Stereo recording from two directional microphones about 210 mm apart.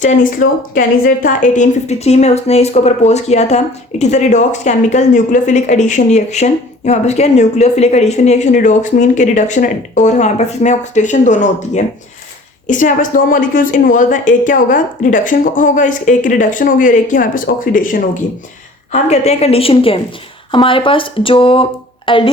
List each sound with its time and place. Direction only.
0.0 s a woman's voice: 40° left (ahead or behind)